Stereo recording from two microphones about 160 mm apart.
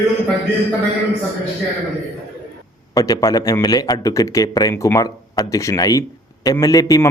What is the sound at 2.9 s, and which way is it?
A man's voice, 20° left (ahead or behind).